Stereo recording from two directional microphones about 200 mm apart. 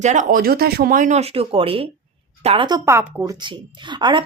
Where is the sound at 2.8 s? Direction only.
15° right (ahead or behind).